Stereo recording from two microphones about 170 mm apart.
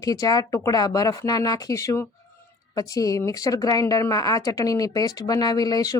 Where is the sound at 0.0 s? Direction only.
20° left (ahead or behind).